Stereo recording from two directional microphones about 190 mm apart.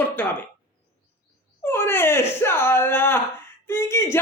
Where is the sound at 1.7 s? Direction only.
10° left (ahead or behind).